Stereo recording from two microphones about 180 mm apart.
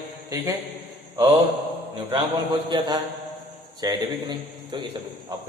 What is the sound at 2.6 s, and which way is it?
A man's voice, 25° right (ahead or behind).